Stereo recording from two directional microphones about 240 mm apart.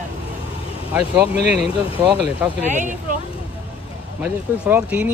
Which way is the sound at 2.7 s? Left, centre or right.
Right.